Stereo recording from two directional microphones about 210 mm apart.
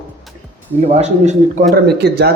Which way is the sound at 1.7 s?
50° right (ahead or behind).